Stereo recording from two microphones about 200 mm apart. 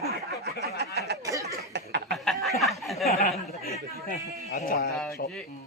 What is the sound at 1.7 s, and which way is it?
Chuckle, 55° right (ahead or behind).